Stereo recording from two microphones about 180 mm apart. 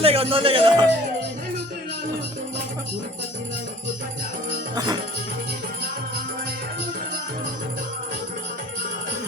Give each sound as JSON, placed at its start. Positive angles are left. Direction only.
{"t": 0.0, "sound": "speech", "side_deg": -30}